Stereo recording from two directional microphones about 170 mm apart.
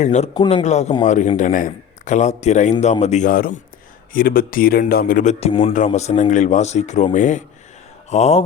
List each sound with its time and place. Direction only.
0.0 s a man's voice: 45° left (ahead or behind)
0.3 s a man's voice: 30° left (ahead or behind)
0.6 s a man's voice: 40° left (ahead or behind)